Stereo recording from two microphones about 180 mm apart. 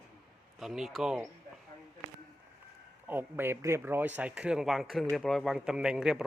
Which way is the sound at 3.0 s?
10° right (ahead or behind).